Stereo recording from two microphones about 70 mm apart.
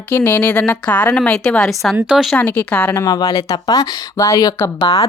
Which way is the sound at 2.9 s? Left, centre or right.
Left.